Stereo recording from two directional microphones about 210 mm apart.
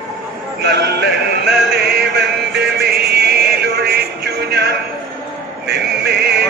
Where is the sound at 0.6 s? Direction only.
50° right (ahead or behind).